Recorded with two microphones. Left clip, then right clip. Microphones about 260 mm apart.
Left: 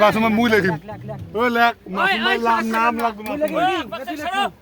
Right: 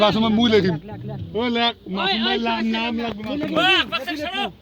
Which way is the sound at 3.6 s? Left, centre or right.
Left.